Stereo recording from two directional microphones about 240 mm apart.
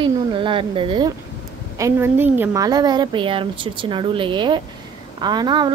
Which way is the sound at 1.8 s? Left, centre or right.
Centre.